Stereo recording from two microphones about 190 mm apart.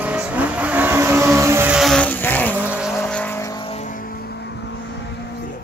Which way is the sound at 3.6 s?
35° left (ahead or behind).